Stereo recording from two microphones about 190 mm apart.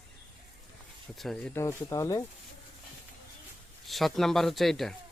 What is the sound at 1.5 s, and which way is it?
Speech, 15° left (ahead or behind).